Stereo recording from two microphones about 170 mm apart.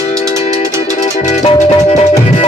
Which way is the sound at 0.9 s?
40° left (ahead or behind).